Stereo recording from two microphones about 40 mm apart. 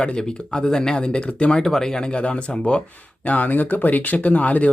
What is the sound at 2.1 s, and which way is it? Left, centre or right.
Speech, left.